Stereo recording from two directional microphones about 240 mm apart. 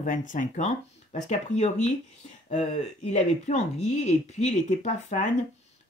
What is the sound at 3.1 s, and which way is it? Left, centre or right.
Speech, left.